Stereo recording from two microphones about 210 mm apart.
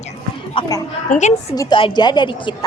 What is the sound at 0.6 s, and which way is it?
Speech, 25° left (ahead or behind).